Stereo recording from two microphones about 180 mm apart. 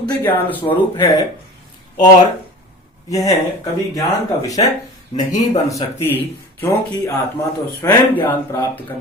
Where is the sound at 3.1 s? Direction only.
20° left (ahead or behind).